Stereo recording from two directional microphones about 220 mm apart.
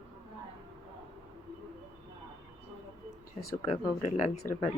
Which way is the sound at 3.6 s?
25° left (ahead or behind).